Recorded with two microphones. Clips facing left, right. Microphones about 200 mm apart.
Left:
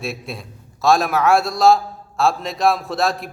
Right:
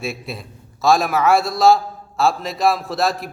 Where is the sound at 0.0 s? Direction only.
Centre (ahead or behind).